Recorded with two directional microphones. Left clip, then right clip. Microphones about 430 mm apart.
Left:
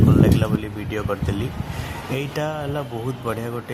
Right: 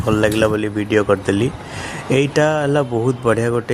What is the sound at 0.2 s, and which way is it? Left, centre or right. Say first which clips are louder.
Speech: right 6 dB; left.